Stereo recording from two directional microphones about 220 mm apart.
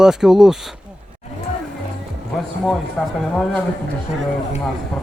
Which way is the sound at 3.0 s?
Centre (ahead or behind).